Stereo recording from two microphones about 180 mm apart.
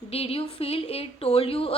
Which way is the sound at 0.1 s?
35° left (ahead or behind).